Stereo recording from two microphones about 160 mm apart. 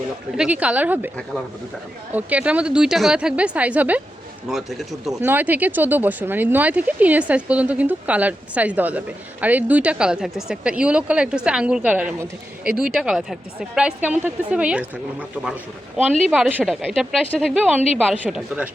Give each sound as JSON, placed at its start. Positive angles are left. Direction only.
{"t": 0.3, "sound": "speech", "side_deg": -10}
{"t": 2.1, "sound": "speech", "side_deg": -10}
{"t": 5.2, "sound": "speech", "side_deg": -10}